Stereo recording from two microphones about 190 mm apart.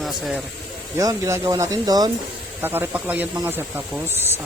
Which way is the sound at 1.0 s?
15° right (ahead or behind).